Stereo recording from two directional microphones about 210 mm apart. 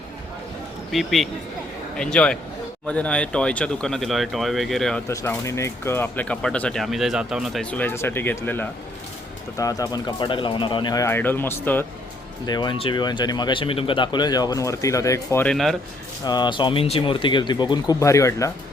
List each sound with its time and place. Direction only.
0.9 s a man's voice: centre (ahead or behind)
5.0 s speech: 15° left (ahead or behind)
12.5 s speech: 20° left (ahead or behind); by 15.7 s 5° left (ahead or behind)
16.2 s speech: 20° left (ahead or behind)